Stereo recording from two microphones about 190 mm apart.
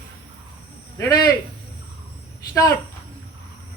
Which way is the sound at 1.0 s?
20° left (ahead or behind).